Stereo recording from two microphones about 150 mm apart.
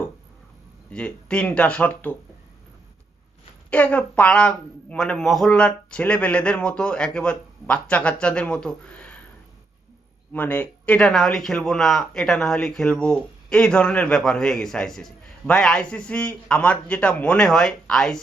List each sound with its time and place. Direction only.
0.9 s a man's voice: 5° left (ahead or behind)
3.7 s a man's voice: 10° left (ahead or behind)
10.3 s speech: 10° left (ahead or behind)